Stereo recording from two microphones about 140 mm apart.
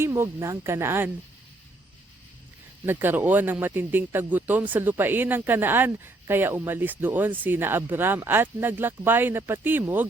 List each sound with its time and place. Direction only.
0.0 s speech: 20° right (ahead or behind)
2.8 s speech: 15° right (ahead or behind)